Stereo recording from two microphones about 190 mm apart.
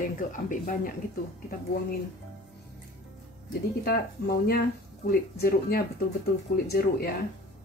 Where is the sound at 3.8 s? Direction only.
55° left (ahead or behind).